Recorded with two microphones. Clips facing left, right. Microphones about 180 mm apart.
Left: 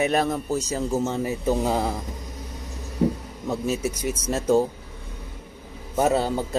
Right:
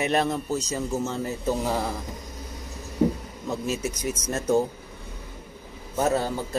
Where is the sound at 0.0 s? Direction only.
5° left (ahead or behind).